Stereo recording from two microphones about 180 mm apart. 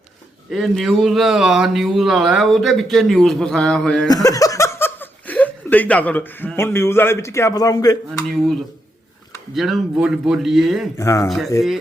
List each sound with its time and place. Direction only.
0.5 s speech: centre (ahead or behind)
4.1 s speech: 20° left (ahead or behind)
9.6 s speech: centre (ahead or behind)
10.9 s speech: 15° left (ahead or behind)
11.3 s speech: centre (ahead or behind)